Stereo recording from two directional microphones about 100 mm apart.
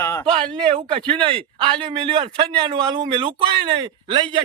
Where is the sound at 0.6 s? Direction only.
65° right (ahead or behind).